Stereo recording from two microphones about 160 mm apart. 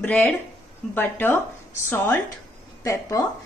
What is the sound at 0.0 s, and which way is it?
A woman's voice, 10° left (ahead or behind).